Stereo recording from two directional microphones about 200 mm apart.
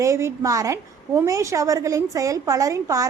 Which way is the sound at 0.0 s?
15° right (ahead or behind).